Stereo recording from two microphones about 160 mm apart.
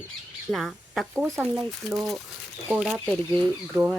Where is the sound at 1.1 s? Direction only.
15° right (ahead or behind).